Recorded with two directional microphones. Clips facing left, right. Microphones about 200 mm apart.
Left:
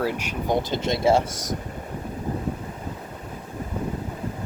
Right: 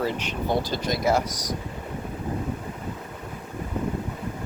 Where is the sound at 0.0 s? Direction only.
10° left (ahead or behind); by 1.5 s 25° left (ahead or behind).